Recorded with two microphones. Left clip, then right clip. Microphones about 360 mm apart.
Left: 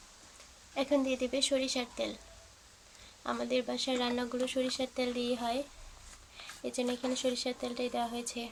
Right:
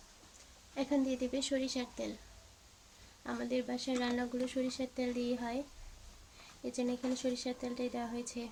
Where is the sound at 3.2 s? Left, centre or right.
Left.